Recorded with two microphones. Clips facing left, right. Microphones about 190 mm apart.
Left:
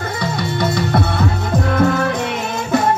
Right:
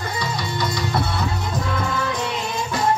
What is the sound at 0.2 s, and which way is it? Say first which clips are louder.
Music: left 7 dB; 55° left (ahead or behind).